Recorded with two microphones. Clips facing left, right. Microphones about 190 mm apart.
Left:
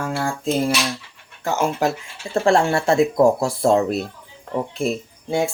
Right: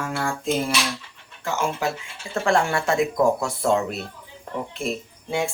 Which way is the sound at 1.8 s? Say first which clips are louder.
Left 7 dB; 40° left (ahead or behind).